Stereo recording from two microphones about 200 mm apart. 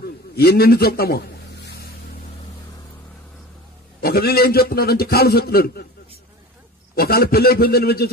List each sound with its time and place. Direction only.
0.0 s a sound: 50° left (ahead or behind)
4.0 s a man's voice: 50° left (ahead or behind)
7.0 s a man's voice: 50° left (ahead or behind)